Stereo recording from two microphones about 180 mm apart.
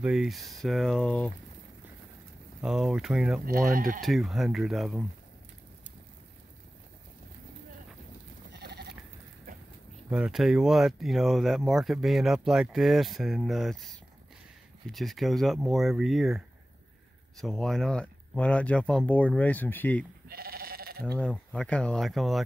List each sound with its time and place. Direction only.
0.0 s speech: centre (ahead or behind)
2.6 s speech: 5° right (ahead or behind)
3.4 s speech: 55° right (ahead or behind)
4.0 s speech: centre (ahead or behind)
8.5 s sheep: 65° right (ahead or behind)
10.0 s speech: 5° right (ahead or behind)
14.9 s speech: centre (ahead or behind)
20.2 s sheep: 55° right (ahead or behind)
21.0 s speech: 5° left (ahead or behind)